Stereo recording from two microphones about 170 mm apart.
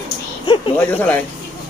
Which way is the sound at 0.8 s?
10° left (ahead or behind).